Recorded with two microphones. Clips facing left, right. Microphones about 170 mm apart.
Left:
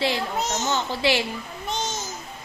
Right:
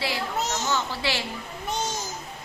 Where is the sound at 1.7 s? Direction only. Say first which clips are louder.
Even; 10° right (ahead or behind).